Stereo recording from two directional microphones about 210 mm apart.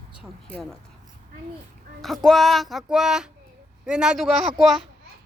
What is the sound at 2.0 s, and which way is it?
Speech, centre (ahead or behind).